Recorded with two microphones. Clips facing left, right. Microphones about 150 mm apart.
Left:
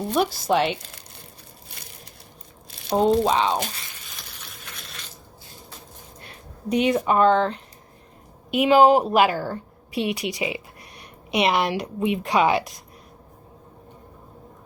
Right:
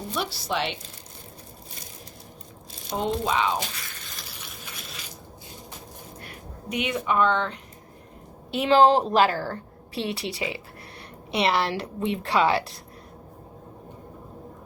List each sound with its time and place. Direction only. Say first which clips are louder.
0.2 s speech: left 8 dB; 50° left (ahead or behind)
2.7 s crumpling: left 8 dB; 70° left (ahead or behind)
3.0 s speech: left 6 dB; 35° left (ahead or behind)
4.1 s a sound: right 1 dB; centre (ahead or behind)
6.2 s speech: left 8 dB; 35° left (ahead or behind)
8.4 s a woman's voice: left 3 dB; 15° left (ahead or behind)